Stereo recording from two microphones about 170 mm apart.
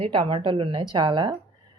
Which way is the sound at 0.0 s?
30° right (ahead or behind).